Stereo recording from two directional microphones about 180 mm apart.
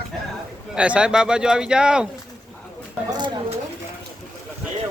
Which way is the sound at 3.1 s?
25° right (ahead or behind).